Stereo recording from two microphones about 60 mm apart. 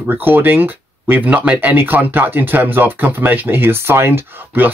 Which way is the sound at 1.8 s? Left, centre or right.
Right.